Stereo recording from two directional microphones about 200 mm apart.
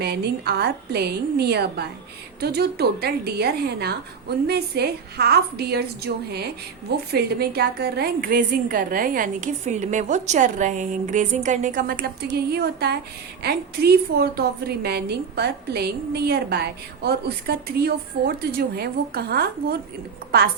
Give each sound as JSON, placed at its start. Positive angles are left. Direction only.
{"t": 0.0, "sound": "a woman's voice", "side_deg": -55}